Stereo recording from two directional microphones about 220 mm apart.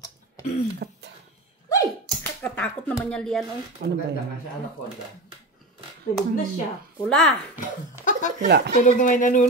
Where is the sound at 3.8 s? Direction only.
50° right (ahead or behind).